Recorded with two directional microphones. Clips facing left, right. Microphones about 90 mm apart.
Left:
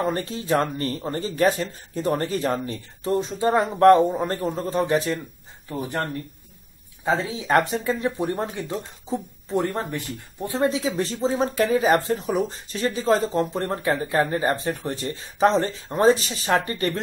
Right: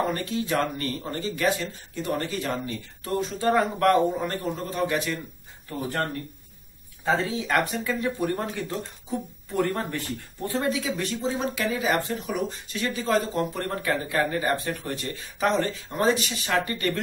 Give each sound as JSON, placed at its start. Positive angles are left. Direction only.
{"t": 0.0, "sound": "speech", "side_deg": 30}
{"t": 5.7, "sound": "speech", "side_deg": 20}
{"t": 7.1, "sound": "speech", "side_deg": 25}